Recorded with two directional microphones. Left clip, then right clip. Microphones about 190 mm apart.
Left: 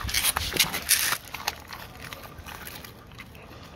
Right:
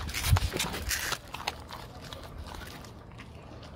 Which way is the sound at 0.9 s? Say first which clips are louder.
Left 7 dB; 45° left (ahead or behind).